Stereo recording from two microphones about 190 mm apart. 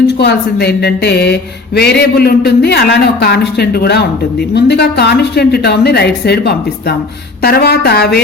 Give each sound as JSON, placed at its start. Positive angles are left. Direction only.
{"t": 0.2, "sound": "speech", "side_deg": 60}